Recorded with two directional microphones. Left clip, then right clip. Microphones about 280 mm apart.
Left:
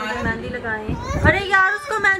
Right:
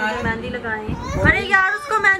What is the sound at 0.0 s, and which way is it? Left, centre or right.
Children playing, centre.